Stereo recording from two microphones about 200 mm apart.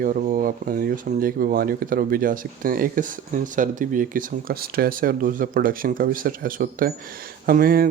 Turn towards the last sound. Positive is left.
turn(degrees=-45)  # may be behind; listen again after turning